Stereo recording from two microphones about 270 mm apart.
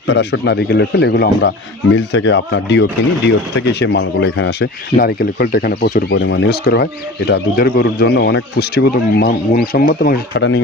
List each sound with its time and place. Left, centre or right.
0.0 s speech: left